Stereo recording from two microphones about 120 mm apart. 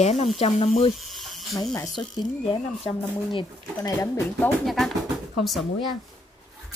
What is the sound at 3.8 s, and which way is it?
Speech, 20° left (ahead or behind).